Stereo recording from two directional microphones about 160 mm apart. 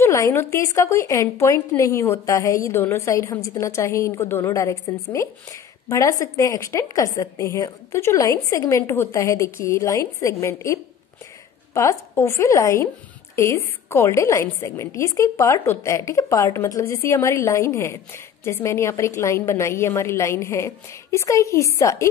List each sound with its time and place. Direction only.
0.0 s a woman's voice: 15° left (ahead or behind)